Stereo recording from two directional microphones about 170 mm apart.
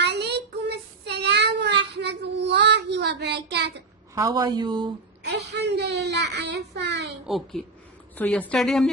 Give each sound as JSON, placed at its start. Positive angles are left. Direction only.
{"t": 0.0, "sound": "child singing", "side_deg": -80}
{"t": 4.1, "sound": "speech", "side_deg": -20}
{"t": 5.2, "sound": "a child's voice", "side_deg": -80}
{"t": 7.3, "sound": "a child's voice", "side_deg": 0}